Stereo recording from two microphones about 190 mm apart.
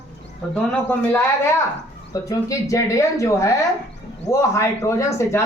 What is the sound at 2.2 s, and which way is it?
Speech, 15° left (ahead or behind).